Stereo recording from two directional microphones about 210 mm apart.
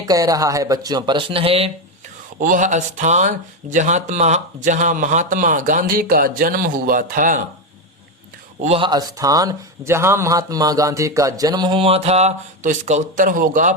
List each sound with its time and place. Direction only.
0.0 s speech: 15° right (ahead or behind)
2.4 s speech: 40° right (ahead or behind)
8.6 s speech: 25° right (ahead or behind)